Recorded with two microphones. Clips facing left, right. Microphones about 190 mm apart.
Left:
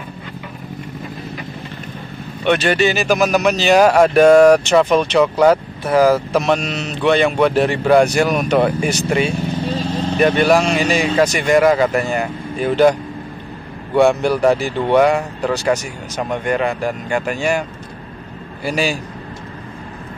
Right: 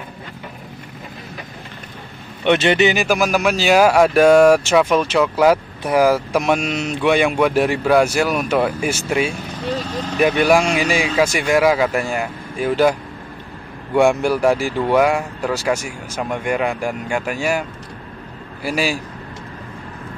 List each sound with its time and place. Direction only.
2.4 s speech: 20° right (ahead or behind); by 9.3 s 5° right (ahead or behind)
9.8 s vehicle: 30° left (ahead or behind)
10.1 s speech: 5° right (ahead or behind)
13.9 s speech: 10° right (ahead or behind)